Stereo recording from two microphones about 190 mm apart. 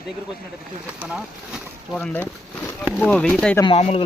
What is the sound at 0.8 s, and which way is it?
Speech, 5° right (ahead or behind).